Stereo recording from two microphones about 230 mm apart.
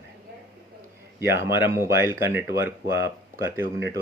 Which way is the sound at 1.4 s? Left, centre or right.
Centre.